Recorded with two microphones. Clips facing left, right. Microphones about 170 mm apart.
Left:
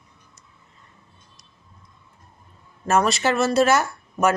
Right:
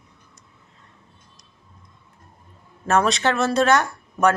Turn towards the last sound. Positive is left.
turn(degrees=5)  # may be behind; listen again after turning